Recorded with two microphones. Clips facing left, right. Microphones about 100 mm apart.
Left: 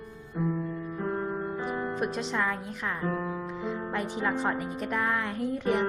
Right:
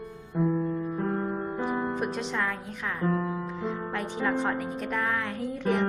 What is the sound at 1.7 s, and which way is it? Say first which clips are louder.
Speech: right 1 dB; 5° right (ahead or behind).